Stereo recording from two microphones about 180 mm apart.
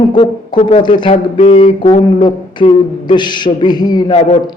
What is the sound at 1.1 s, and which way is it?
Speech, 40° left (ahead or behind).